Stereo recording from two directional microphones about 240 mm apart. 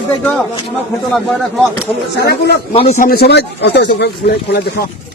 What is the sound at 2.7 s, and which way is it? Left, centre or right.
Speech, left.